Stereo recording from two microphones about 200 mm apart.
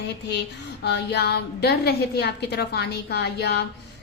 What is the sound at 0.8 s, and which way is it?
A woman's voice, 55° left (ahead or behind).